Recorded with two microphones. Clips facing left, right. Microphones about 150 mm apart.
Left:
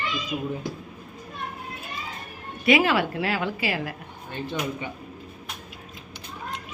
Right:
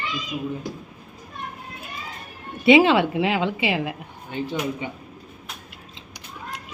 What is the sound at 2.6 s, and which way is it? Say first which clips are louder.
A woman's voice: right 6 dB; 25° right (ahead or behind).